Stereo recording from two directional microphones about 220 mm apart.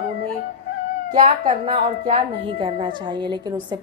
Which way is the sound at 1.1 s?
35° right (ahead or behind).